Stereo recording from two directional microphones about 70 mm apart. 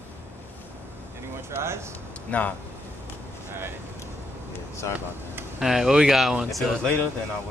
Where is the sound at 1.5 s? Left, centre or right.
Right.